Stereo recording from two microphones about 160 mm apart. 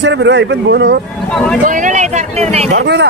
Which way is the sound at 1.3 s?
5° left (ahead or behind).